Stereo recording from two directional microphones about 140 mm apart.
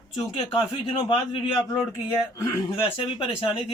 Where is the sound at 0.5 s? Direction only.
40° left (ahead or behind).